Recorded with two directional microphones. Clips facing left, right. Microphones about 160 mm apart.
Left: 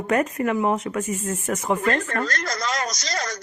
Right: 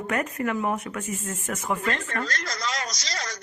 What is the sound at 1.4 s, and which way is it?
Speech, 40° left (ahead or behind).